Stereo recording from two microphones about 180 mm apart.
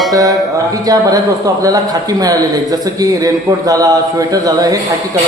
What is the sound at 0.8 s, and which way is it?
A man's voice, 20° right (ahead or behind).